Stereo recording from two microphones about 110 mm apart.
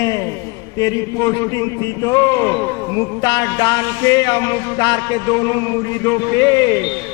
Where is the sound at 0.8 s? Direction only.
30° left (ahead or behind).